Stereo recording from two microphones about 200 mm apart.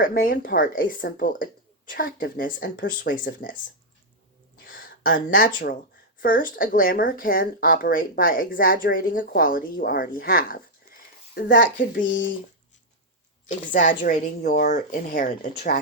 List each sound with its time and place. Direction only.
0.0 s speech: 45° left (ahead or behind)
4.6 s a sound: 45° left (ahead or behind)
6.1 s a woman's voice: 45° left (ahead or behind)
13.5 s a woman's voice: 40° left (ahead or behind)